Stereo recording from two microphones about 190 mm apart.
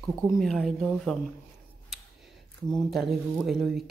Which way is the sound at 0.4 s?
Centre (ahead or behind).